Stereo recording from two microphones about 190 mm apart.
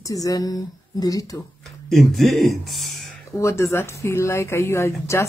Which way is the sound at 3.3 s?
15° left (ahead or behind).